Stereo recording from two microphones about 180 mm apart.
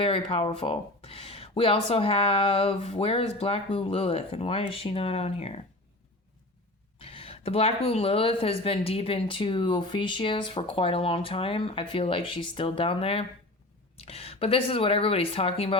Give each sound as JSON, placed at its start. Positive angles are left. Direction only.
{"t": 0.0, "sound": "speech", "side_deg": 30}
{"t": 7.0, "sound": "speech", "side_deg": 30}